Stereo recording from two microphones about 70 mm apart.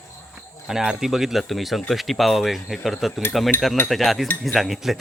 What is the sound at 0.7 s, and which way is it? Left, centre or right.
Speech, centre.